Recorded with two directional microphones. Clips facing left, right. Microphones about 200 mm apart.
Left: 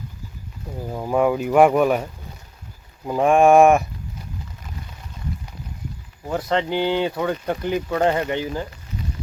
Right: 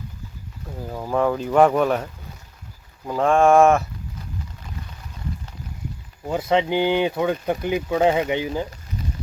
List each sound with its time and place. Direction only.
0.9 s speech: 10° left (ahead or behind)
3.1 s speech: 15° left (ahead or behind)
6.2 s speech: 10° right (ahead or behind)